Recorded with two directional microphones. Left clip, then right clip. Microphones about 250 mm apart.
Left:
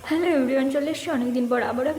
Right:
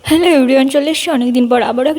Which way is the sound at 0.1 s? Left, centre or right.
Right.